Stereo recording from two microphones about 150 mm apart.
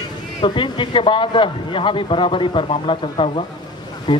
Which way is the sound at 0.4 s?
35° left (ahead or behind).